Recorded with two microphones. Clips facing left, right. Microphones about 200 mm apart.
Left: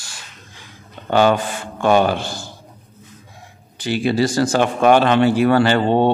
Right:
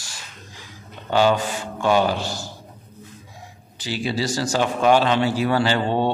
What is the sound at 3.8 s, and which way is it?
A man's voice, 55° left (ahead or behind).